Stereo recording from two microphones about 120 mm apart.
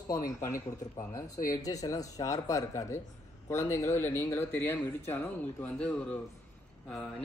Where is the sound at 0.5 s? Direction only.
25° left (ahead or behind).